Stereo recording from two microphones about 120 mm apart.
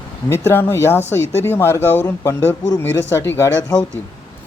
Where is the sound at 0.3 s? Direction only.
20° left (ahead or behind).